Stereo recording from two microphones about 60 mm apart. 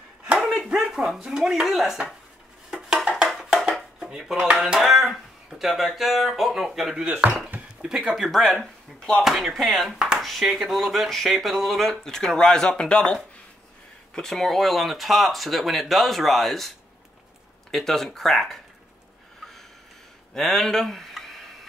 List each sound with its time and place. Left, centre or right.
0.4 s dog: centre
0.7 s speech: centre
2.7 s dishes: centre
3.3 s music: centre
4.0 s speech: centre
7.1 s speech: centre
9.9 s a sound: centre
10.4 s speech: centre
14.1 s speech: centre
20.3 s speech: centre